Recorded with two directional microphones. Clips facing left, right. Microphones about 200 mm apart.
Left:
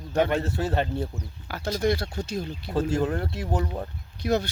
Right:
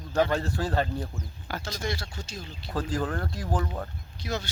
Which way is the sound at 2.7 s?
25° left (ahead or behind).